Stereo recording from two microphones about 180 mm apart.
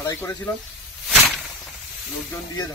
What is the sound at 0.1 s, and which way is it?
Speech, 15° left (ahead or behind).